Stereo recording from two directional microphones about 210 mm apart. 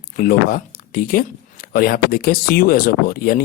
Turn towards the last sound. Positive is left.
turn(degrees=45)  # may be behind; listen again after turning